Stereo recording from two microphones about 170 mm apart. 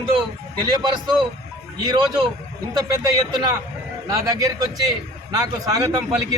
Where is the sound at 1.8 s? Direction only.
25° right (ahead or behind).